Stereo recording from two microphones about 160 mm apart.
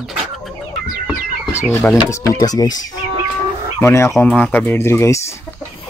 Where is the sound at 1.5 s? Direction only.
15° left (ahead or behind).